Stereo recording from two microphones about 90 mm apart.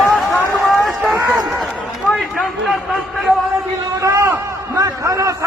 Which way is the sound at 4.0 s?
40° right (ahead or behind).